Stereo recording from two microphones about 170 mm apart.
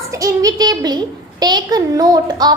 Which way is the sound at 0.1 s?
20° right (ahead or behind).